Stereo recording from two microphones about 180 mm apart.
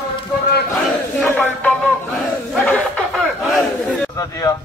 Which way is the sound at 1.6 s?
5° left (ahead or behind).